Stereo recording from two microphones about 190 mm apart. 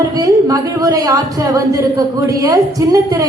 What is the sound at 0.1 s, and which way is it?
A woman's voice, 20° right (ahead or behind).